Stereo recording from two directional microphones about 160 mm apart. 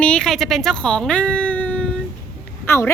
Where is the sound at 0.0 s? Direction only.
5° left (ahead or behind).